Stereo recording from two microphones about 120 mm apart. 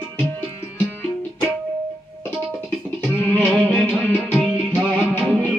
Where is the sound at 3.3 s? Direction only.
10° left (ahead or behind).